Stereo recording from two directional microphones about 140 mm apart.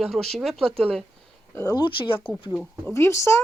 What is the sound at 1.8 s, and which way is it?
Speech, 35° left (ahead or behind).